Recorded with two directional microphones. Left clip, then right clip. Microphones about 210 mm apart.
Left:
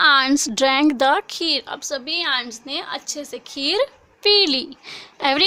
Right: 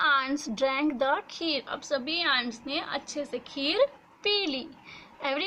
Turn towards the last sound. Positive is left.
turn(degrees=55)  # may be behind; listen again after turning